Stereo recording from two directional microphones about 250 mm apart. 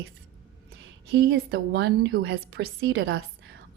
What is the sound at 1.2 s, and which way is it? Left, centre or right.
A woman's voice, right.